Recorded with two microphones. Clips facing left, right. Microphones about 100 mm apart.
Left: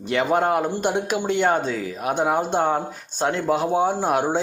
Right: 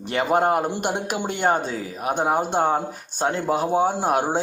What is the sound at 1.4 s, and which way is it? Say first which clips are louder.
Speech: right 1 dB; 35° right (ahead or behind).